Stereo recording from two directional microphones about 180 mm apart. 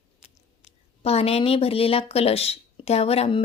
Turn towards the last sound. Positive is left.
turn(degrees=35)  # may be behind; listen again after turning